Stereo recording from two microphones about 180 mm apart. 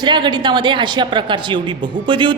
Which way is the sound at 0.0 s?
25° right (ahead or behind).